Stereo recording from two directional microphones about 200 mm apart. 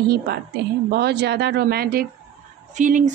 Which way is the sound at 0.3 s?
50° right (ahead or behind).